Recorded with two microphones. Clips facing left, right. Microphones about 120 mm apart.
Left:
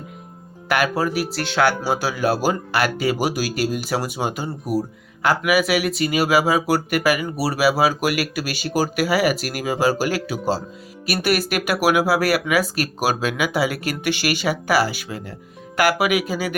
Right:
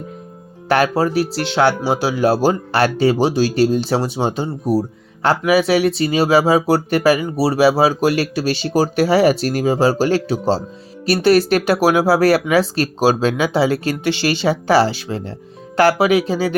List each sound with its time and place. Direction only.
0.7 s speech: 30° right (ahead or behind)